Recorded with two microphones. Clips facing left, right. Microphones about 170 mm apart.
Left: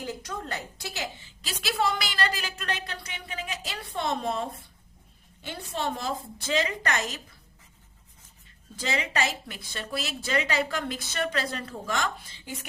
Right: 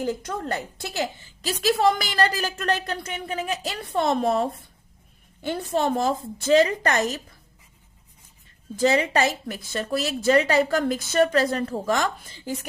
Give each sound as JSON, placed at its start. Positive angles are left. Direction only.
{"t": 0.0, "sound": "a woman's voice", "side_deg": -50}
{"t": 5.5, "sound": "a woman's voice", "side_deg": -45}
{"t": 8.8, "sound": "a woman's voice", "side_deg": -40}